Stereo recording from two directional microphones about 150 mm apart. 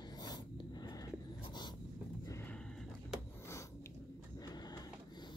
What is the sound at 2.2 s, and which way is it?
Horse, 20° left (ahead or behind).